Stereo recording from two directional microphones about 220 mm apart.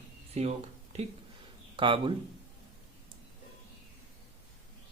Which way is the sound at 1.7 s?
20° right (ahead or behind).